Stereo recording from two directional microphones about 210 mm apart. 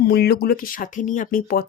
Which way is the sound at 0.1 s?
50° left (ahead or behind).